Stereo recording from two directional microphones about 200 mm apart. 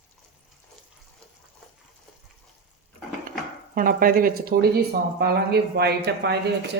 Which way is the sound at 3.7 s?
45° right (ahead or behind).